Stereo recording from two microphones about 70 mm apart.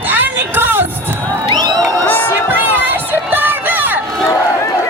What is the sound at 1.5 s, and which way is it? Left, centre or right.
Crowd, right.